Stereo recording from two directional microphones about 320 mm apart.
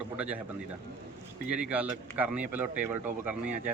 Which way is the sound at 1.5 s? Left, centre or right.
Centre.